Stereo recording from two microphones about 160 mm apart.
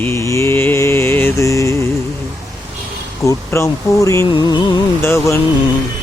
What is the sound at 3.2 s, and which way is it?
Speech, 20° left (ahead or behind).